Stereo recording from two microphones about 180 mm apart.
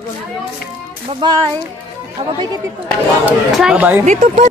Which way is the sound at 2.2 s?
25° right (ahead or behind).